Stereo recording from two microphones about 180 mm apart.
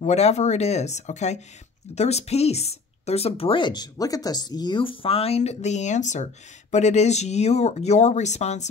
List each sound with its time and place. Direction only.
0.0 s speech: 40° left (ahead or behind)